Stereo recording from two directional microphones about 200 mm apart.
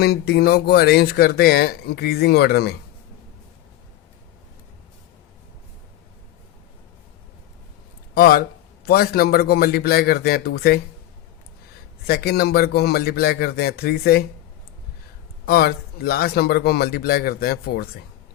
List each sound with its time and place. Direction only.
0.0 s speech: 50° left (ahead or behind)
8.1 s speech: 45° left (ahead or behind)
12.0 s speech: 50° left (ahead or behind)
15.4 s speech: 50° left (ahead or behind)